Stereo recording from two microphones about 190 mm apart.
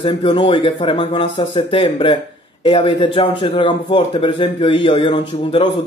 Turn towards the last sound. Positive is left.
turn(degrees=30)  # may be behind; listen again after turning